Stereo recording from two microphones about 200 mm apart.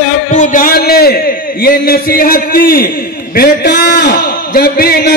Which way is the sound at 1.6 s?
45° left (ahead or behind).